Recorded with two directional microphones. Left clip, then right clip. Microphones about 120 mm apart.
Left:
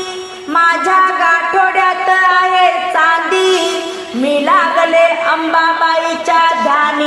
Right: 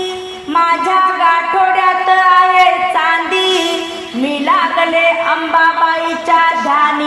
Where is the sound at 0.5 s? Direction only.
35° left (ahead or behind).